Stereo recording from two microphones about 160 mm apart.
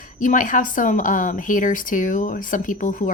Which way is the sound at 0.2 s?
55° left (ahead or behind).